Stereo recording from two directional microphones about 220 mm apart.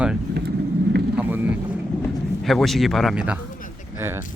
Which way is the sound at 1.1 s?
10° right (ahead or behind).